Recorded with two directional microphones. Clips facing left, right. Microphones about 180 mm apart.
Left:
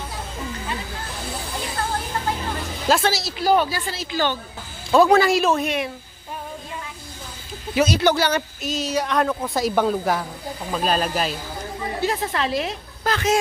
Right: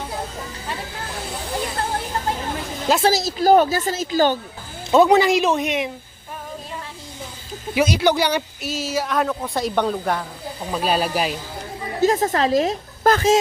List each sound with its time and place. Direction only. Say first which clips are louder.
3.0 s a woman's voice: right 5 dB; 45° right (ahead or behind)
4.9 s speech: right 1 dB; 20° right (ahead or behind)
7.8 s speech: even; 15° right (ahead or behind); by 10.2 s 5° left (ahead or behind)
10.7 s speech: right 1 dB; 5° right (ahead or behind)
11.9 s a woman's voice: right 7 dB; 40° right (ahead or behind)